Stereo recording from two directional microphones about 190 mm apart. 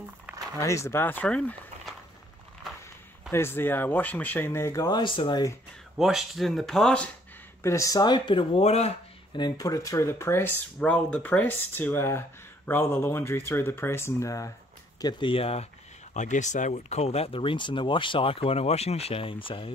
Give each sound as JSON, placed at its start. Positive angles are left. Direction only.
{"t": 0.6, "sound": "speech", "side_deg": 15}
{"t": 3.3, "sound": "speech", "side_deg": 10}
{"t": 5.9, "sound": "speech", "side_deg": 0}
{"t": 7.6, "sound": "speech", "side_deg": 15}